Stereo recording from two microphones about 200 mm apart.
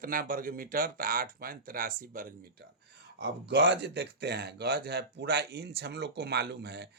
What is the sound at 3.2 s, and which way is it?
Speech, 60° right (ahead or behind).